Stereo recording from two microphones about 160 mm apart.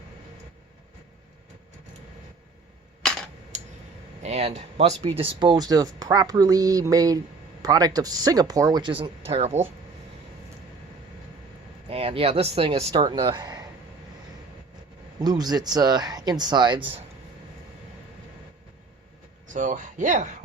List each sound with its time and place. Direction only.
3.5 s tick-tock: 45° right (ahead or behind)
4.2 s speech: 45° right (ahead or behind)
11.9 s speech: 35° right (ahead or behind)
15.2 s speech: 25° right (ahead or behind)
19.5 s speech: 50° right (ahead or behind)